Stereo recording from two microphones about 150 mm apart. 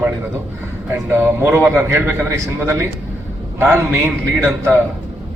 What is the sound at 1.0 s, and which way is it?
A man's voice, 15° right (ahead or behind).